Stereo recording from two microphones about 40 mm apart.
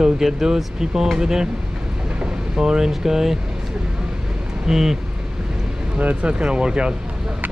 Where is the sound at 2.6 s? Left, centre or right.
Centre.